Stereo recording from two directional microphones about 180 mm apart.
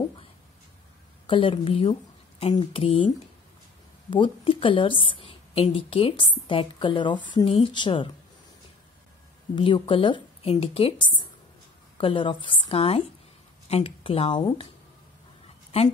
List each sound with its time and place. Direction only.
1.2 s a woman's voice: 30° left (ahead or behind)
4.1 s a woman's voice: 30° left (ahead or behind)
9.6 s a woman's voice: 30° left (ahead or behind)